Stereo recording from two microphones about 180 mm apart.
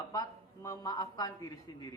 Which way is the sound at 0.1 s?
20° left (ahead or behind).